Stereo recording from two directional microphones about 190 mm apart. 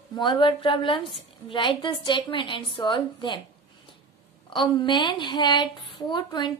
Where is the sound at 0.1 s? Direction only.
25° left (ahead or behind).